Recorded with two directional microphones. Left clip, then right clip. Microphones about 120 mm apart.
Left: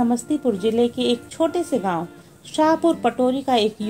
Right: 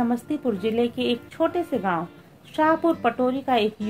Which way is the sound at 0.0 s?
25° left (ahead or behind).